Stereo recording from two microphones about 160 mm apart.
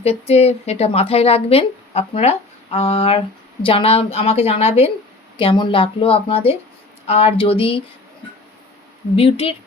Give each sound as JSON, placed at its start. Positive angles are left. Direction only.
{"t": 0.0, "sound": "speech", "side_deg": 40}
{"t": 9.1, "sound": "speech", "side_deg": 40}